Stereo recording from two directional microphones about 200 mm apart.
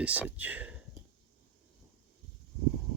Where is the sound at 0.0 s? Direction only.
5° right (ahead or behind).